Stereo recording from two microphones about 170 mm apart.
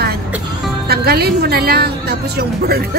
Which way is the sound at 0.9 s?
70° right (ahead or behind).